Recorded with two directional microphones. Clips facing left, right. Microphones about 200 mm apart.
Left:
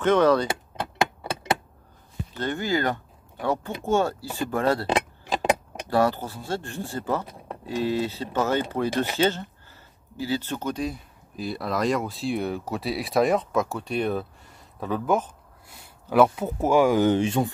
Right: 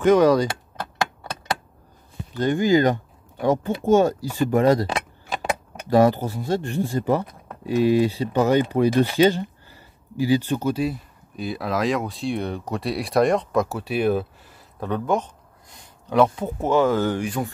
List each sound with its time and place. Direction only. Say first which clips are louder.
0.0 s speech: right 4 dB; 10° right (ahead or behind)
2.3 s speech: right 8 dB; 15° right (ahead or behind)
5.9 s speech: right 6 dB; 15° right (ahead or behind); by 17.5 s 25° left (ahead or behind)